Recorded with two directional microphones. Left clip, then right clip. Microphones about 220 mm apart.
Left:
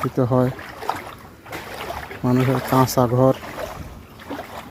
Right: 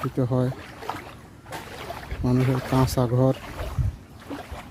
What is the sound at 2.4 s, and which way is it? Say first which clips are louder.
Speech: left 5 dB; 45° left (ahead or behind).